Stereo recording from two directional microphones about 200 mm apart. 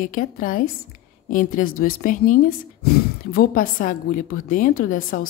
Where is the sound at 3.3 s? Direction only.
45° left (ahead or behind).